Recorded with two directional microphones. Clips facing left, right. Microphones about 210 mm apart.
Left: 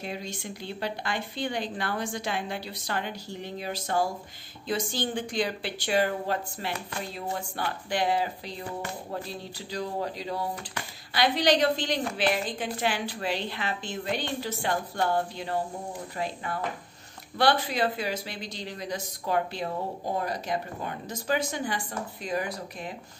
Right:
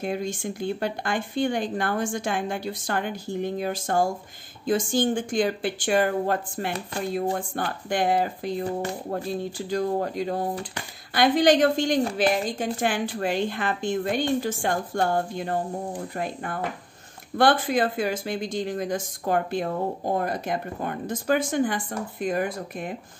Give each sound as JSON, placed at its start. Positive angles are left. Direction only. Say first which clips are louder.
{"t": 0.0, "sound": "speech", "louder": "right 8 dB", "side_deg": -50}
{"t": 17.4, "sound": "speech", "louder": "right 4 dB", "side_deg": -50}